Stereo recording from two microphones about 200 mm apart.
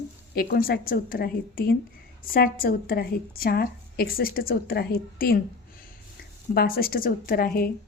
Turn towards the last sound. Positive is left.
turn(degrees=45)  # may be behind; listen again after turning